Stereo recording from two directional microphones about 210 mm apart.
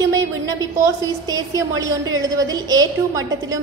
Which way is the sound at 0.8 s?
15° right (ahead or behind).